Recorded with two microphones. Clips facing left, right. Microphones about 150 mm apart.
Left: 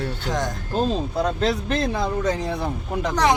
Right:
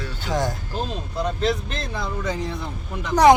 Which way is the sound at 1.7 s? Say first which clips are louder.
Left 7 dB; 65° left (ahead or behind).